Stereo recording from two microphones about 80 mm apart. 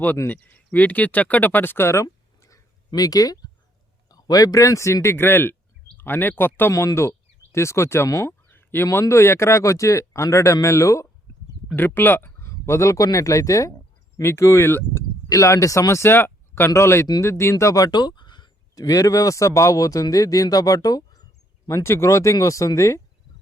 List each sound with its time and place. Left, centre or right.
0.3 s speech: left
5.0 s speech: left
8.4 s speech: left
11.8 s speech: left
15.3 s speech: left
18.7 s speech: left
21.8 s speech: left